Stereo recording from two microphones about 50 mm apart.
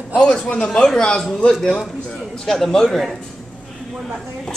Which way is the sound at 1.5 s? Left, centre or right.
Centre.